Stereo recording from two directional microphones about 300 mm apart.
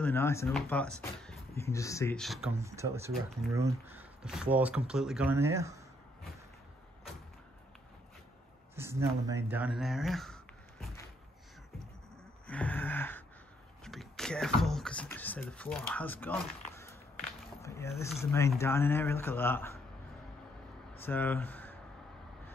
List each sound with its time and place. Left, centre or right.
0.0 s speech: centre
8.7 s speech: centre
12.4 s gasp: centre
13.8 s speech: centre
17.6 s a sound: centre
18.2 s speech: centre
21.0 s speech: centre